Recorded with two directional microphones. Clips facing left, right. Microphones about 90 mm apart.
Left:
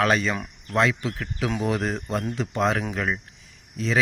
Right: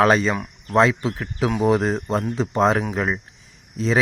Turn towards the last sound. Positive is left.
turn(degrees=-30)  # may be behind; listen again after turning